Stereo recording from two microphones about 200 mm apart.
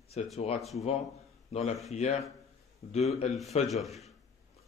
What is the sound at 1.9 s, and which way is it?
Speech, 35° left (ahead or behind).